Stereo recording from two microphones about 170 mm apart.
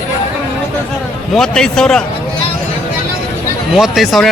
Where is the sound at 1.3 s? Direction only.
5° left (ahead or behind).